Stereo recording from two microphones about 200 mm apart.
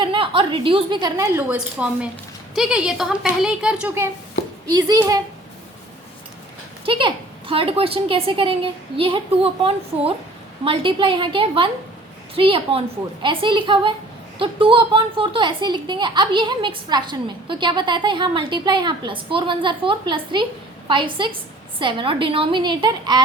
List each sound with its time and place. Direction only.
0.0 s a woman's voice: 25° right (ahead or behind)
6.8 s speech: 25° right (ahead or behind)